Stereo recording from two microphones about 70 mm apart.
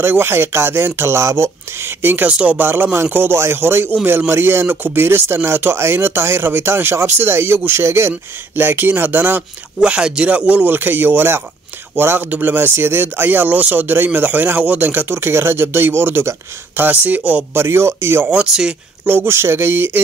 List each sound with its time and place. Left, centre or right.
0.0 s speech: right
2.2 s speech: centre
2.7 s speech: right
9.8 s speech: centre
17.6 s speech: right
18.3 s speech: centre
19.0 s speech: right